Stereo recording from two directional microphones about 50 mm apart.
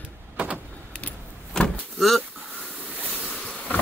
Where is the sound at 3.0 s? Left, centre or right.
Left.